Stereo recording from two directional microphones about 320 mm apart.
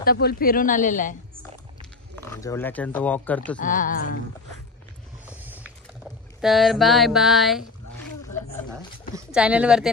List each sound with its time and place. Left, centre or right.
0.0 s speech: left
2.1 s speech: centre
3.5 s speech: left
5.2 s vehicle: centre
6.4 s speech: centre
8.3 s a sound: left
9.1 s speech: centre